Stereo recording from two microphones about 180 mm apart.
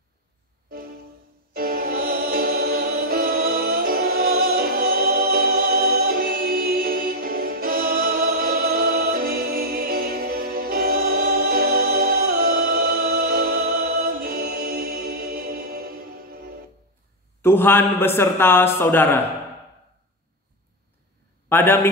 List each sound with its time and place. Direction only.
1.5 s music: 55° right (ahead or behind)
17.4 s a man's voice: 10° left (ahead or behind)
21.5 s a man's voice: 10° left (ahead or behind)